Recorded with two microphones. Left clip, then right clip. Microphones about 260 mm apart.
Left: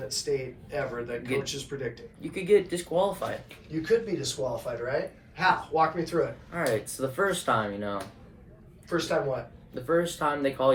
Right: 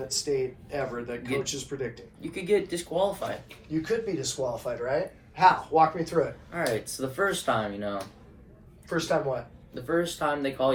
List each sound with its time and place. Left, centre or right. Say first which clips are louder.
0.1 s speech: right 2 dB; centre
2.2 s speech: left 3 dB; centre
3.7 s speech: left 2 dB; right
6.5 s speech: left 1 dB; centre
9.0 s speech: right 1 dB; right
9.7 s speech: left 1 dB; centre